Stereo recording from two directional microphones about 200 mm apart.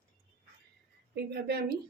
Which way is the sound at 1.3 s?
55° right (ahead or behind).